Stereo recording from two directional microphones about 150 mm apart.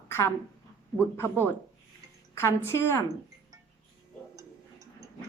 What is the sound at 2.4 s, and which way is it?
Speech, 15° left (ahead or behind).